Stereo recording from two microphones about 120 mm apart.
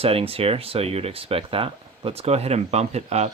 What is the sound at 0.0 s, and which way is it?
Speech, 55° right (ahead or behind).